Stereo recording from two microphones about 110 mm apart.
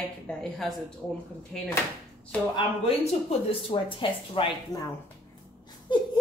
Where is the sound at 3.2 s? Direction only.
50° left (ahead or behind).